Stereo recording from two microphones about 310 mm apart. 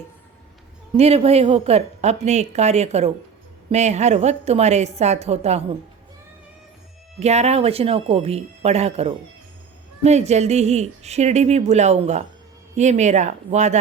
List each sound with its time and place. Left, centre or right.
0.9 s speech: centre
7.2 s speech: right